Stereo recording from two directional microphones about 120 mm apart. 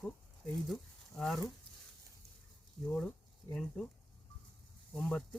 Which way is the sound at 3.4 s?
25° left (ahead or behind).